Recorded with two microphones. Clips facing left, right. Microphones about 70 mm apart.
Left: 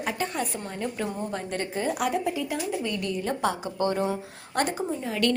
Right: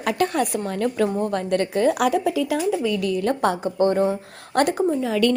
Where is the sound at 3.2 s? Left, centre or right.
Right.